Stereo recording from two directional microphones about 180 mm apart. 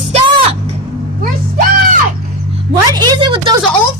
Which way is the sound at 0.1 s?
35° right (ahead or behind).